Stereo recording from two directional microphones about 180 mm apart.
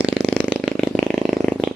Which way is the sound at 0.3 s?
5° right (ahead or behind).